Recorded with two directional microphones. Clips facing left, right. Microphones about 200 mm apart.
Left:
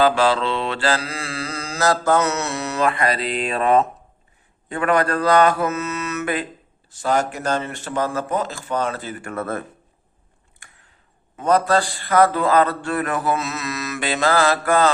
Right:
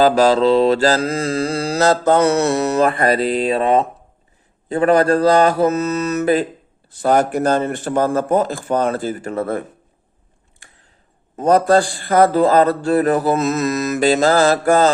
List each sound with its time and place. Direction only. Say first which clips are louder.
0.0 s mantra: right 5 dB; 40° right (ahead or behind)
4.7 s a man's voice: right 6 dB; 35° right (ahead or behind)
5.1 s mantra: right 3 dB; 40° right (ahead or behind)
6.9 s a man's voice: right 6 dB; 55° right (ahead or behind)
9.3 s speech: right 3 dB; 15° right (ahead or behind)
11.3 s a man's voice: right 5 dB; 40° right (ahead or behind)